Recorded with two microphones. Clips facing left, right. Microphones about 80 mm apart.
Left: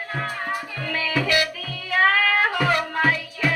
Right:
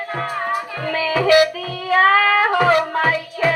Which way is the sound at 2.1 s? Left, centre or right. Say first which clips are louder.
Right 6 dB; right.